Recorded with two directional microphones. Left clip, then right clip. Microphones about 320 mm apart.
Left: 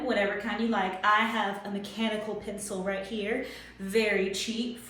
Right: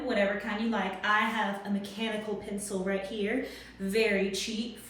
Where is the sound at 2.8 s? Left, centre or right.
Centre.